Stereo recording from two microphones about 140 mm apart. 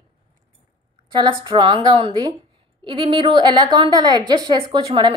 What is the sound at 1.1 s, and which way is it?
A woman's voice, 35° right (ahead or behind).